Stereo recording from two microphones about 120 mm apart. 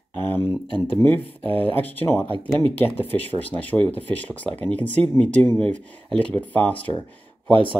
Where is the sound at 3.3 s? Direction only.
15° left (ahead or behind).